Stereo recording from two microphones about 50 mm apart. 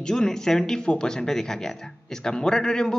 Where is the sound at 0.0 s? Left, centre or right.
Centre.